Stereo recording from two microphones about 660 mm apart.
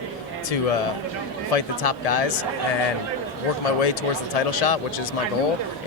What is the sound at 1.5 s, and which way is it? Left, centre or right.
Speech, left.